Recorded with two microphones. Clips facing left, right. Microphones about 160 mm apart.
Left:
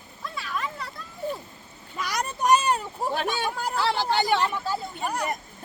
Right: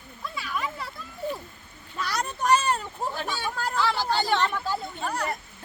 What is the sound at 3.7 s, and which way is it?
Speech, 30° left (ahead or behind).